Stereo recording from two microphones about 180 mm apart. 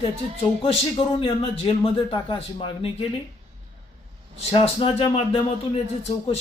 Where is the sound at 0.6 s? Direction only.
30° left (ahead or behind).